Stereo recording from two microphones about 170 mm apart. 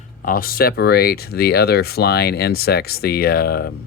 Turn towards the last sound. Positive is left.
turn(degrees=65)  # may be behind; listen again after turning